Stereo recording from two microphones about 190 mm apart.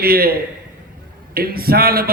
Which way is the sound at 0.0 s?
50° right (ahead or behind).